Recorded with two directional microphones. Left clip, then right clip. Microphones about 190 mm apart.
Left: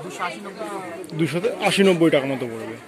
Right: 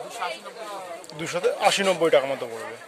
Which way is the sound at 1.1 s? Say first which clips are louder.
Left 1 dB; 10° right (ahead or behind).